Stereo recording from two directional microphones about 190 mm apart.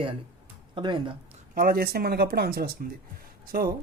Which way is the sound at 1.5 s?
50° right (ahead or behind).